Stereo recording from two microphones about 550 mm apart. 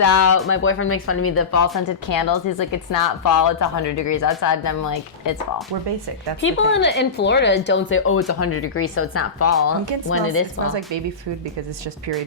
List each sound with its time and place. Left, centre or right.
0.0 s speech: left
2.0 s a woman's voice: left
6.4 s speech: centre